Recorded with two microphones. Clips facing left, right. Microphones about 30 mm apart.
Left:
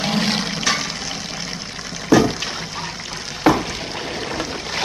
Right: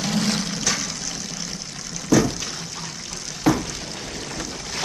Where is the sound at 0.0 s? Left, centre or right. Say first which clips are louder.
Left 3 dB; left.